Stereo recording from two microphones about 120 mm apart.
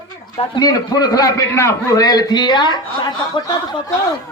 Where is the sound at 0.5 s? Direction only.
35° left (ahead or behind).